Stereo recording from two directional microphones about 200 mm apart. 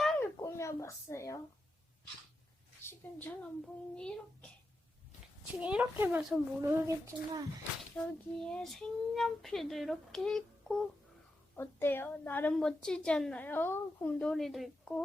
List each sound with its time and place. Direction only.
0.0 s a sound: 5° left (ahead or behind)
2.8 s a woman's voice: 10° left (ahead or behind)
5.5 s a child's voice: 5° right (ahead or behind)
7.8 s a woman's voice: 5° left (ahead or behind)